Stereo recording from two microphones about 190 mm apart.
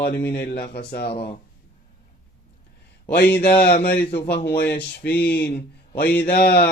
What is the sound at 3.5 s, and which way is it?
Speech, 60° left (ahead or behind).